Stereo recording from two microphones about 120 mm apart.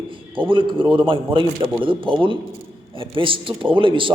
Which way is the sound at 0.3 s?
45° right (ahead or behind).